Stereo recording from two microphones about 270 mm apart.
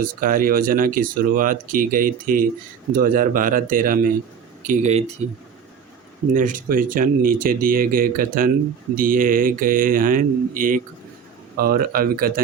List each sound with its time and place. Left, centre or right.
0.0 s speech: right
6.3 s speech: right